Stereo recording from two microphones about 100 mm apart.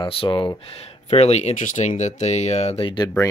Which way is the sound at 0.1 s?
60° left (ahead or behind).